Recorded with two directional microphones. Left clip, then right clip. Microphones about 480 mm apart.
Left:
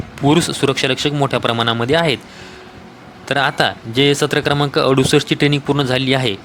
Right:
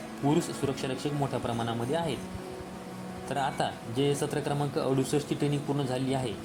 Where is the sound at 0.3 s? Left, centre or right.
Right.